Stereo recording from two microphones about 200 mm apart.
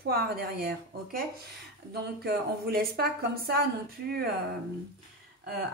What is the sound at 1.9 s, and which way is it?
A woman's voice, 50° right (ahead or behind).